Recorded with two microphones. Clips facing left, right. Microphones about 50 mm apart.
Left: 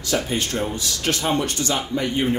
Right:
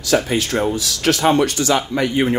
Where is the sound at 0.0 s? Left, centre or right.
Right.